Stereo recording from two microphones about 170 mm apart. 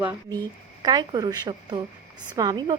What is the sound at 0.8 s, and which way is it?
A woman's voice, 25° right (ahead or behind).